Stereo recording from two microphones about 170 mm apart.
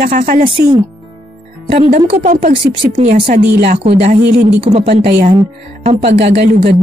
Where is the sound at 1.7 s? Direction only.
40° right (ahead or behind).